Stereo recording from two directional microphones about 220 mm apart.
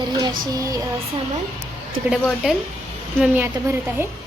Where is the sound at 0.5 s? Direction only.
15° right (ahead or behind).